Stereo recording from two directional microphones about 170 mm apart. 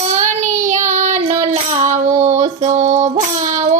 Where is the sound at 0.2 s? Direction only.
45° right (ahead or behind).